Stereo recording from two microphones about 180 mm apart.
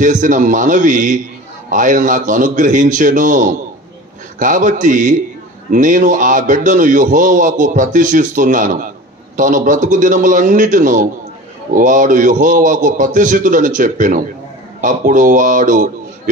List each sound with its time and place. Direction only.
0.0 s a man's voice: 45° right (ahead or behind)